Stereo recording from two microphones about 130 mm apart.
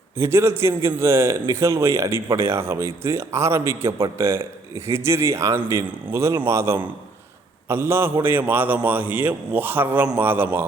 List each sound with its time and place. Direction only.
0.2 s a man's voice: 20° right (ahead or behind)